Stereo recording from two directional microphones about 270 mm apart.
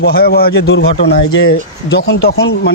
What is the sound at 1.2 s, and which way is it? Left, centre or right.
Speech, left.